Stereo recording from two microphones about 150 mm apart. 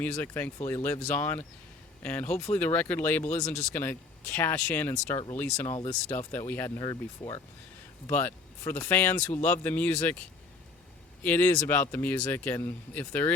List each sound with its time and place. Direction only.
0.0 s speech: 10° left (ahead or behind)
3.2 s speech: 50° left (ahead or behind)
3.8 s speech: 15° left (ahead or behind); by 7.4 s 30° left (ahead or behind)
8.0 s speech: 15° left (ahead or behind)